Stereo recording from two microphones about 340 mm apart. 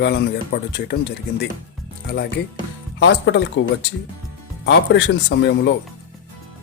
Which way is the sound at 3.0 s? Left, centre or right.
Left.